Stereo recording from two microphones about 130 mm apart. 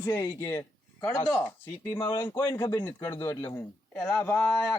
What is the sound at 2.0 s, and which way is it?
Speech, 20° left (ahead or behind).